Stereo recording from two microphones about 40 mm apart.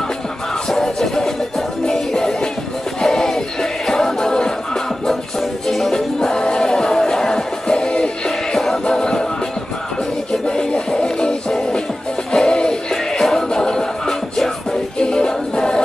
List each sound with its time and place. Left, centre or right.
0.7 s music: centre
5.7 s music: centre
10.5 s music: centre
12.9 s music: centre